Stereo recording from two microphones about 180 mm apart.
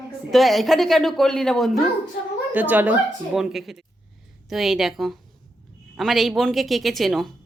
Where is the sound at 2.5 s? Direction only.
10° right (ahead or behind).